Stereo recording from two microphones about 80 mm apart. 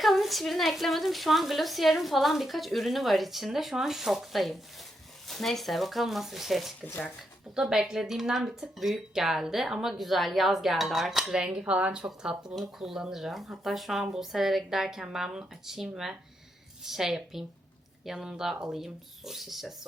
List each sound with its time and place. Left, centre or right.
0.0 s speech: centre
6.8 s speech: left
7.5 s speech: centre